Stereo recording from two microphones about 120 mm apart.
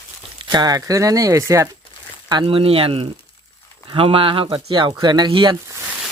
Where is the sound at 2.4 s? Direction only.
50° right (ahead or behind).